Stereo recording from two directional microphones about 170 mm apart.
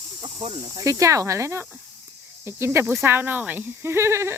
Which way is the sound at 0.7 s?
20° right (ahead or behind).